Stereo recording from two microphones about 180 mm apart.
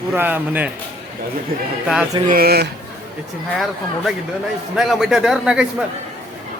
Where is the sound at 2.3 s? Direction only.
55° right (ahead or behind).